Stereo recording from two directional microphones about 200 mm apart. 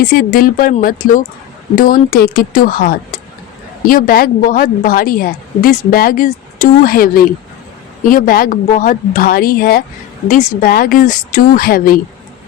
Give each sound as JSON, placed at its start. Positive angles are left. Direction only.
{"t": 0.1, "sound": "a woman's voice", "side_deg": 45}